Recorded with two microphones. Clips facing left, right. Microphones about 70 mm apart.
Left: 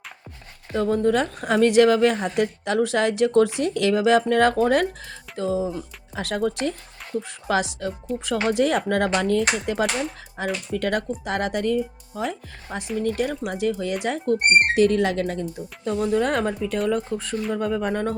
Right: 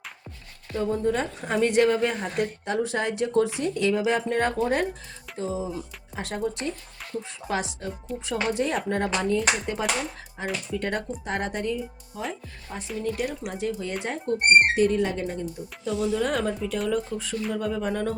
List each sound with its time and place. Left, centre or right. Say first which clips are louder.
0.7 s a woman's voice: left 5 dB; left
13.0 s a woman's voice: left 4 dB; left